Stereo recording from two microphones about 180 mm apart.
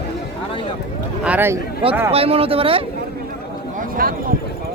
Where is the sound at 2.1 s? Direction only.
30° right (ahead or behind).